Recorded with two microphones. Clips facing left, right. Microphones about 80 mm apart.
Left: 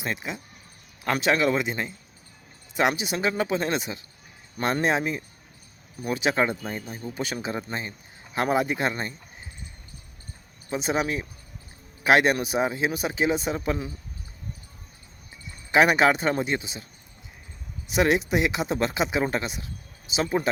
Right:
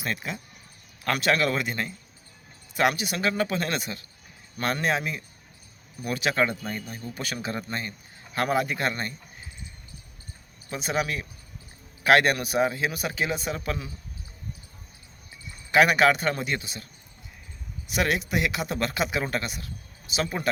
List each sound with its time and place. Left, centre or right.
0.0 s a man's voice: centre
10.7 s a man's voice: left
15.7 s a man's voice: left
17.8 s a man's voice: left